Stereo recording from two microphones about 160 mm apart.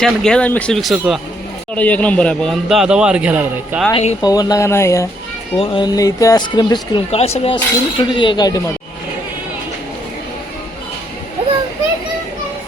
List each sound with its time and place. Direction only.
0.0 s a man's voice: 5° left (ahead or behind)
1.7 s a man's voice: 10° left (ahead or behind); by 3.8 s 10° right (ahead or behind)
4.2 s speech: 25° left (ahead or behind)
5.5 s speech: 30° left (ahead or behind)
6.9 s speech: 40° left (ahead or behind); by 8.6 s 25° left (ahead or behind)